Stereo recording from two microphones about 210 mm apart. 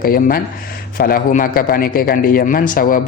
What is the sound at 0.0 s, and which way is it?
Speech, 45° left (ahead or behind).